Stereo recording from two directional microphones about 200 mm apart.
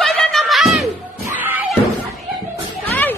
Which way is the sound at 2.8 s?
10° left (ahead or behind).